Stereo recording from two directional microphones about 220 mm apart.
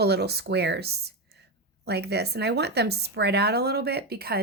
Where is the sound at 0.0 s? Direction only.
50° right (ahead or behind).